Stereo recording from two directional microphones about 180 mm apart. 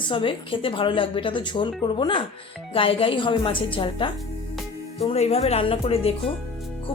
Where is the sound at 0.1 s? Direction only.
30° left (ahead or behind).